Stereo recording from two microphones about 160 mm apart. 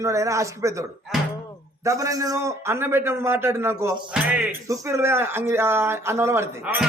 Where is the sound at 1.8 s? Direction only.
20° right (ahead or behind).